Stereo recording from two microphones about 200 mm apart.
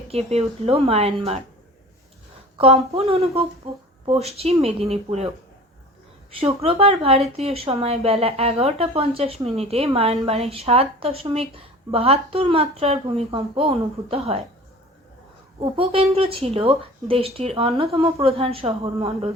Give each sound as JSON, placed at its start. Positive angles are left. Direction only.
{"t": 0.1, "sound": "speech", "side_deg": -30}
{"t": 2.9, "sound": "speech", "side_deg": -30}
{"t": 6.4, "sound": "speech", "side_deg": -30}
{"t": 15.6, "sound": "speech", "side_deg": -25}